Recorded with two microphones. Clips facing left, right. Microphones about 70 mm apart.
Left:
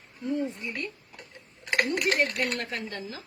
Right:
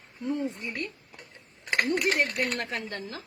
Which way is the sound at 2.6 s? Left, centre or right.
Right.